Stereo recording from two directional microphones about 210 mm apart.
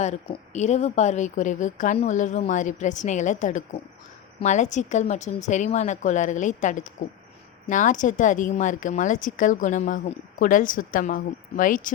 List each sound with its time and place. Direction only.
0.0 s a woman's voice: 35° left (ahead or behind)